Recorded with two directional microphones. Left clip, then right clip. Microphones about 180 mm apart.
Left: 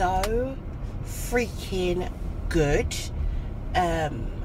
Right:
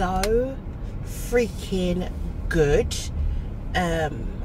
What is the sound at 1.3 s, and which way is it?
Speech, 5° right (ahead or behind).